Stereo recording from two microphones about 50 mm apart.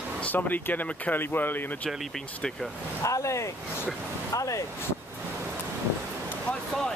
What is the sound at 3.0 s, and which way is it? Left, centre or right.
Speech, left.